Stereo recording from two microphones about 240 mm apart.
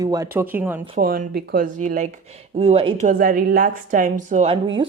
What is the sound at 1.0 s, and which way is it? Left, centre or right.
A woman's voice, right.